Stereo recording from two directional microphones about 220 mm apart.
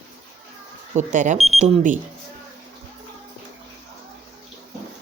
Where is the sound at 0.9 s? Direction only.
35° right (ahead or behind).